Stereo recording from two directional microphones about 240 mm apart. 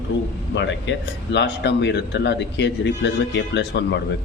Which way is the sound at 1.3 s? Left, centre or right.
Left.